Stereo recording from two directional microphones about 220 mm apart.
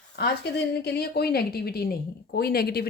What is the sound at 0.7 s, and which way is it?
Speech, 45° left (ahead or behind).